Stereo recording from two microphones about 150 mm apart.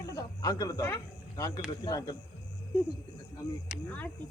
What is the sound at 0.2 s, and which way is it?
Speech, 25° left (ahead or behind).